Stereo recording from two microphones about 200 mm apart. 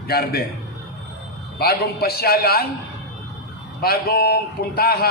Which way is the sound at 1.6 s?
50° left (ahead or behind).